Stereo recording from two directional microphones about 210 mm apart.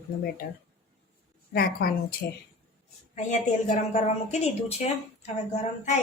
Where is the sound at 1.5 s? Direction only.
45° left (ahead or behind).